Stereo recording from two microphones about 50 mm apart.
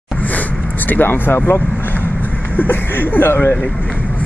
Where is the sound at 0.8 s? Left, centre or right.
Left.